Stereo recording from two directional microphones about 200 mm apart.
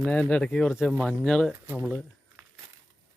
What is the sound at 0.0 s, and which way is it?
Speech, 5° left (ahead or behind).